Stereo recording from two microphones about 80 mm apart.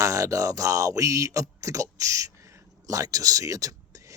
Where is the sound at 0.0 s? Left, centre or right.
Right.